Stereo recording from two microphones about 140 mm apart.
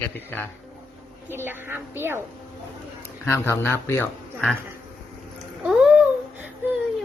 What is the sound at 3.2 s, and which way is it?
Speech, 20° left (ahead or behind).